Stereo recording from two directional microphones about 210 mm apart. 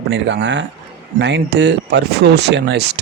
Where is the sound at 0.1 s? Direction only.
60° right (ahead or behind).